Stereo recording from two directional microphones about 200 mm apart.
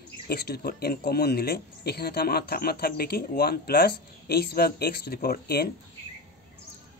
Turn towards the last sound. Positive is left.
turn(degrees=50)  # may be behind; listen again after turning